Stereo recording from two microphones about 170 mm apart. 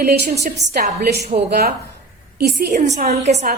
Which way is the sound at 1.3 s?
35° right (ahead or behind).